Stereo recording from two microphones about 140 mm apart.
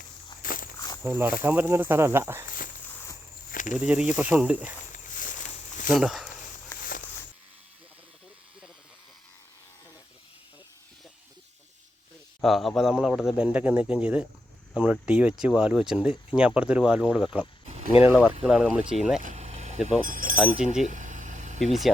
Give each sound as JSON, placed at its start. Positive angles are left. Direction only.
{"t": 0.4, "sound": "walk", "side_deg": 85}
{"t": 1.0, "sound": "speech", "side_deg": -15}
{"t": 3.5, "sound": "a sound", "side_deg": 65}
{"t": 3.8, "sound": "speech", "side_deg": -10}
{"t": 4.9, "sound": "a sound", "side_deg": 70}
{"t": 6.0, "sound": "speech", "side_deg": 0}
{"t": 12.4, "sound": "speech", "side_deg": 0}
{"t": 19.2, "sound": "vehicle", "side_deg": -55}
{"t": 20.1, "sound": "chink", "side_deg": -75}
{"t": 20.3, "sound": "speech", "side_deg": -5}
{"t": 20.8, "sound": "vehicle", "side_deg": -65}
{"t": 21.7, "sound": "speech", "side_deg": 0}